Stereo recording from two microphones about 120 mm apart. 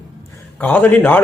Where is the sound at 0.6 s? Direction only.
15° left (ahead or behind).